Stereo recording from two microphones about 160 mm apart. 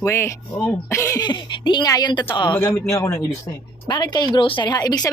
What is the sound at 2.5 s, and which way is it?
A woman's voice, 15° left (ahead or behind).